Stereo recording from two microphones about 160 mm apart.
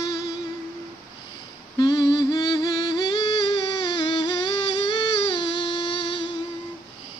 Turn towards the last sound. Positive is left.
turn(degrees=30)  # may be behind; listen again after turning